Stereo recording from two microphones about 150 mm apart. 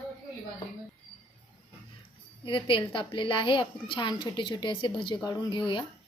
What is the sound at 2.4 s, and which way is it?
A woman's voice, 35° left (ahead or behind).